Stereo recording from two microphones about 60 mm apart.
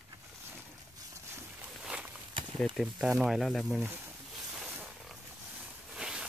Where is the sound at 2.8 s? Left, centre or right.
Centre.